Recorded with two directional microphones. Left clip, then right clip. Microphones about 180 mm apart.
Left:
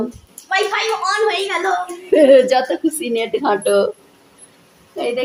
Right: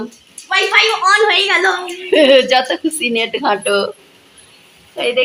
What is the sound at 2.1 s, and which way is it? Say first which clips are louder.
A woman's voice: right 1 dB; 5° left (ahead or behind).